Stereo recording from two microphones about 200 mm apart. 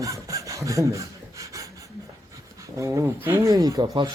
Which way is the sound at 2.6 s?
15° right (ahead or behind).